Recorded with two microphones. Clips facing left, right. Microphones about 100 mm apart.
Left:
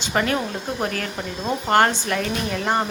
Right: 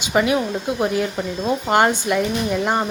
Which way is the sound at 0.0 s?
10° right (ahead or behind).